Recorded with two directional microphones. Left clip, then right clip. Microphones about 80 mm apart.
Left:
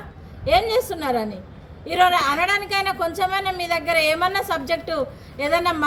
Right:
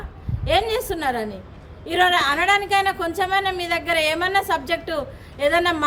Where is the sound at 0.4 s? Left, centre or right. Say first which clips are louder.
Left 2 dB; right.